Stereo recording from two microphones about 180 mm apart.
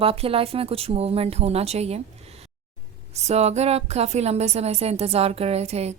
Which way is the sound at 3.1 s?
35° right (ahead or behind).